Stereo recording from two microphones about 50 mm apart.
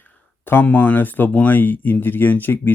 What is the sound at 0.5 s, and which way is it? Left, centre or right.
Speech, left.